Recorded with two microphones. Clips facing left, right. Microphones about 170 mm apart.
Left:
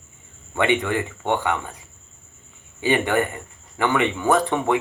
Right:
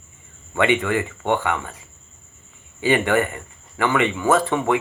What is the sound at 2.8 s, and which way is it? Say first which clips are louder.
Speech: right 2 dB; 15° left (ahead or behind).